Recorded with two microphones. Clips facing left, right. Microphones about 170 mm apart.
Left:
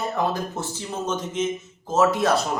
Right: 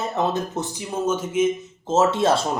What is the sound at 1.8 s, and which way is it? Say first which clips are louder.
Speech: right 1 dB; 25° right (ahead or behind).